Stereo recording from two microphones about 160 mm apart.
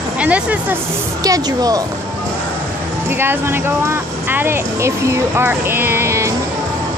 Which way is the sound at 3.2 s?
15° right (ahead or behind).